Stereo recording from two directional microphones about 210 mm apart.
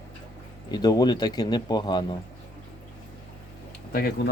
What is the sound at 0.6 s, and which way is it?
Speech, 20° left (ahead or behind).